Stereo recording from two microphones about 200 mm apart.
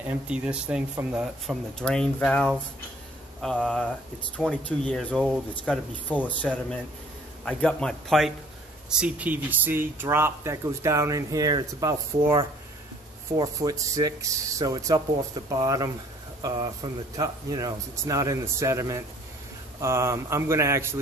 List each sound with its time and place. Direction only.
0.0 s speech: 5° right (ahead or behind)
9.0 s speech: 10° right (ahead or behind)
13.4 s speech: 15° right (ahead or behind)